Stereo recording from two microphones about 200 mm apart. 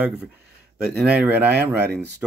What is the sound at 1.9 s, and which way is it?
Speech, 55° right (ahead or behind).